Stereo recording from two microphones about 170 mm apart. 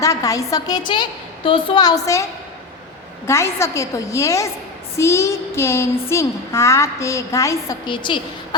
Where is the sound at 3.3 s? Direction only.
15° left (ahead or behind).